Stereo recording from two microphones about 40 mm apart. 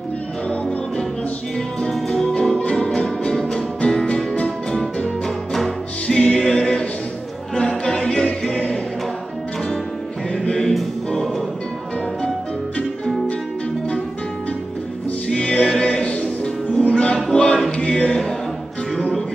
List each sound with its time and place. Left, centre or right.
2.0 s music: centre
3.3 s music: centre
3.8 s music: left
5.2 s music: centre
6.0 s music: centre
10.3 s music: left
15.2 s music: left
17.6 s choir: left